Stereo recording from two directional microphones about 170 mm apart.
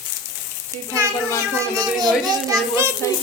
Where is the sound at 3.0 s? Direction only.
15° left (ahead or behind).